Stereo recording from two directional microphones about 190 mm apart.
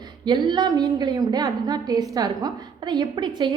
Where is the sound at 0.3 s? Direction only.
25° right (ahead or behind).